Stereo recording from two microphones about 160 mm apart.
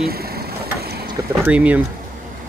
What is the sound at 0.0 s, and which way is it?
Mechanisms, 75° right (ahead or behind).